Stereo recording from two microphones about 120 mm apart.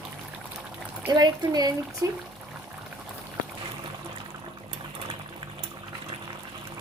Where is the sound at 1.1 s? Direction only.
35° right (ahead or behind).